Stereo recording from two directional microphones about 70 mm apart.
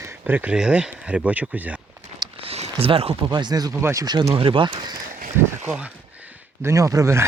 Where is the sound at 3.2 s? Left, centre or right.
Right.